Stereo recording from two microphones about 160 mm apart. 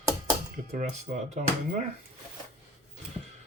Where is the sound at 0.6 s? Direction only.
45° right (ahead or behind).